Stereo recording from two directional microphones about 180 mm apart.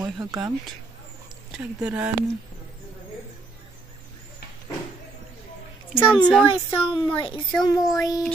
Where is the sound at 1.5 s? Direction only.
5° right (ahead or behind).